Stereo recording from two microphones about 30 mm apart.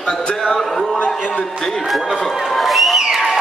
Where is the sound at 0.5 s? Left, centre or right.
Centre.